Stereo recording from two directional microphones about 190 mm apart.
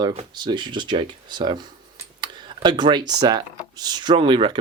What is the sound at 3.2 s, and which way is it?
Speech, 20° right (ahead or behind).